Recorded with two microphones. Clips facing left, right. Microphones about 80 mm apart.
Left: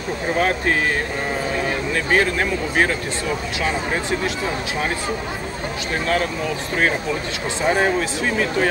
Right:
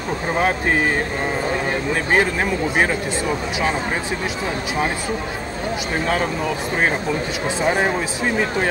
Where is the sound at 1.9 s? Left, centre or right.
Centre.